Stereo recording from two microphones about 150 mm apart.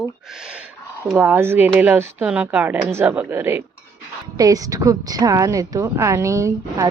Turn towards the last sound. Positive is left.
turn(degrees=-20)  # may be behind; listen again after turning